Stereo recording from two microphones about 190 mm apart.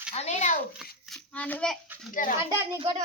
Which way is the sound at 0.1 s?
35° left (ahead or behind).